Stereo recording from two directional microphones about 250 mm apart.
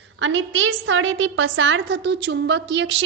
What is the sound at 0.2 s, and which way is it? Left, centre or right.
A woman's voice, right.